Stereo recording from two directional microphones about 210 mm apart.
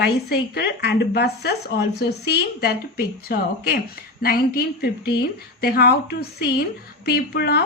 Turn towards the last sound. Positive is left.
turn(degrees=50)  # may be behind; listen again after turning